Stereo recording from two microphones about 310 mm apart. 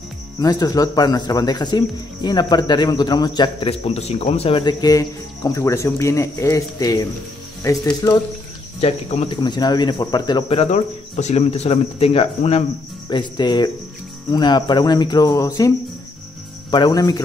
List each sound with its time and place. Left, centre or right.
0.4 s speech: centre
16.7 s speech: centre